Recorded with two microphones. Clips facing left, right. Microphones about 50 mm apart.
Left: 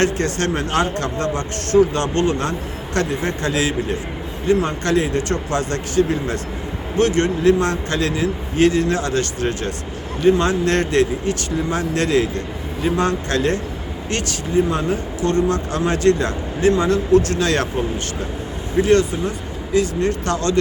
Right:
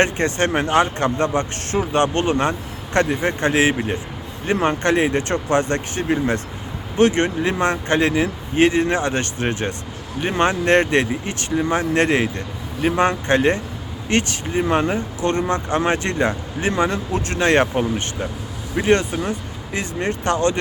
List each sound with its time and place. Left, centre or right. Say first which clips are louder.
0.0 s speech: right 1 dB; right